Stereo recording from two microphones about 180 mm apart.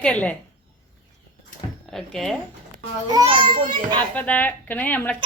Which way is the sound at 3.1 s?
25° right (ahead or behind).